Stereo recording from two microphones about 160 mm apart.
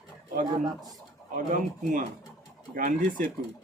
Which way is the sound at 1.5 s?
55° right (ahead or behind).